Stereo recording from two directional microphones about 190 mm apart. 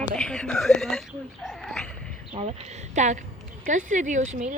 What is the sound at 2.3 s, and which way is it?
A woman's voice, 35° right (ahead or behind).